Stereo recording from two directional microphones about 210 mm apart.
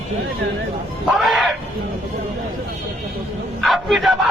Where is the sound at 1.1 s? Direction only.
Centre (ahead or behind).